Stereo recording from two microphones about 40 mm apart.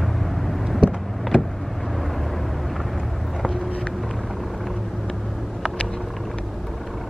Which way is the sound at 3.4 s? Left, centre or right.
Centre.